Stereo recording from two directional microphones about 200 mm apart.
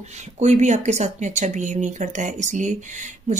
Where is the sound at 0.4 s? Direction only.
35° right (ahead or behind).